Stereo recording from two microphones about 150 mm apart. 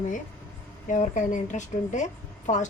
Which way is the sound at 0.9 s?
55° left (ahead or behind).